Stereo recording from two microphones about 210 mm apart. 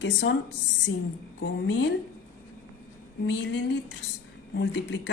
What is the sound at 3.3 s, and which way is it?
Speech, 55° left (ahead or behind).